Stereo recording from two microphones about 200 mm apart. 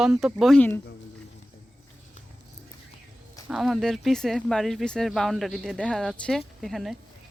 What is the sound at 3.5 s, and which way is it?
Speech, centre (ahead or behind).